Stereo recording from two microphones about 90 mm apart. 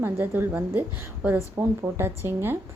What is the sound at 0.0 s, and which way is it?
A woman's voice, 25° right (ahead or behind).